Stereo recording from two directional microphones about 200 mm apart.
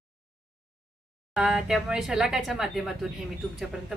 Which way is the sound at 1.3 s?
5° right (ahead or behind).